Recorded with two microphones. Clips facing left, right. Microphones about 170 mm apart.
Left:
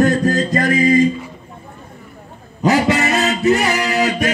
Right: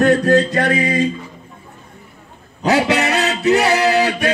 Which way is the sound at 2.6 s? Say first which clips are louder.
Left 1 dB; 70° right (ahead or behind).